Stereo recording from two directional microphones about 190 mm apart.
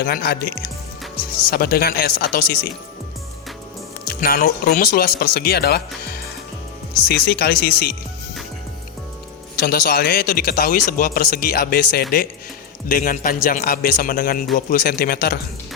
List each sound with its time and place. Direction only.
0.0 s a man's voice: 55° left (ahead or behind)
4.0 s speech: 50° left (ahead or behind)
7.1 s speech: 60° left (ahead or behind)
9.6 s a man's voice: 55° left (ahead or behind)